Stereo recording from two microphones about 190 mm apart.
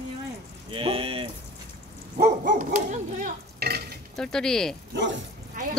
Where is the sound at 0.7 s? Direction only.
30° right (ahead or behind).